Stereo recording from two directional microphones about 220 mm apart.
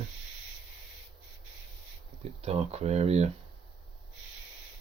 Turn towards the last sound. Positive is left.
turn(degrees=-30)  # may be behind; listen again after turning